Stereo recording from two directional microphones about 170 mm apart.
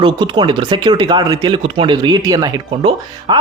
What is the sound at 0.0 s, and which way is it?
Speech, 30° right (ahead or behind).